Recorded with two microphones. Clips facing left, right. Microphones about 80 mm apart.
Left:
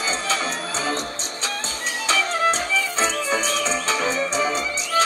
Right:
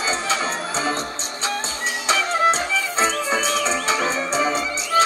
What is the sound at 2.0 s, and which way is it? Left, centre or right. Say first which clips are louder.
Music: right 2 dB; right.